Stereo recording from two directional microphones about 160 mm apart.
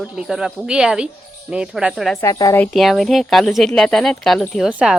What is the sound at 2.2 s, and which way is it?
Speech, 20° left (ahead or behind).